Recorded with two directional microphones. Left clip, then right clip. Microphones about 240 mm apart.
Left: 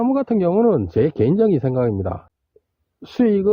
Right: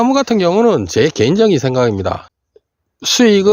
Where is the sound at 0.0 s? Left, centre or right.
Centre.